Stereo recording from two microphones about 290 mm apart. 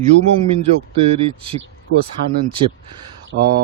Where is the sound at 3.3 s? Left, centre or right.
Right.